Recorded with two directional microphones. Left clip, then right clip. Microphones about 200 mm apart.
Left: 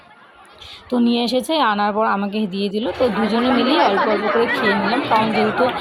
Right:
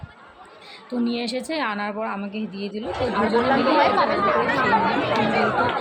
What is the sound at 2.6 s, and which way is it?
Speech, 5° left (ahead or behind).